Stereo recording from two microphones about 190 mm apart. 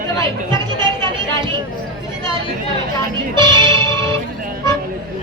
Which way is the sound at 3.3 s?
25° right (ahead or behind).